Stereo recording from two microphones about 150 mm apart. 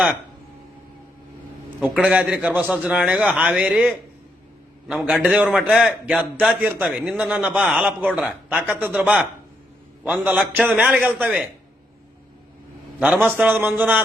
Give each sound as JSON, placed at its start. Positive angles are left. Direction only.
{"t": 1.8, "sound": "a man's voice", "side_deg": -5}
{"t": 13.2, "sound": "a man's voice", "side_deg": -10}